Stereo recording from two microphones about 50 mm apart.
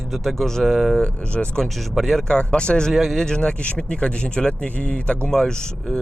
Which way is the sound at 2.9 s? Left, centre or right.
Centre.